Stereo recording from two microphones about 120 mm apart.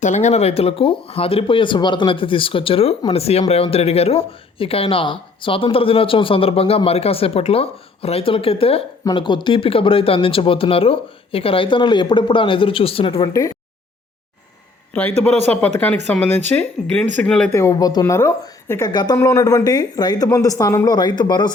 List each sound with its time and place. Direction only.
0.0 s speech: 75° left (ahead or behind); by 8.8 s 55° left (ahead or behind)
9.0 s speech: 40° left (ahead or behind)
15.5 s speech: 10° left (ahead or behind)
17.5 s a woman's voice: 25° left (ahead or behind)